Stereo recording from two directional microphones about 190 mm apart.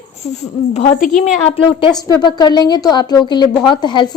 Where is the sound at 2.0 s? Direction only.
20° left (ahead or behind).